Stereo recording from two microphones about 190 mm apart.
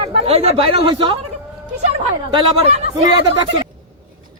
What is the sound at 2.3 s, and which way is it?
Speech, 25° right (ahead or behind).